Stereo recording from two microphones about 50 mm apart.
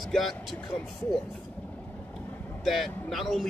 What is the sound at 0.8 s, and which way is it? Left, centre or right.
Speech, centre.